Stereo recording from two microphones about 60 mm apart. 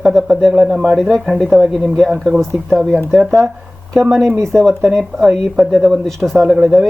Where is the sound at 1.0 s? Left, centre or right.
Centre.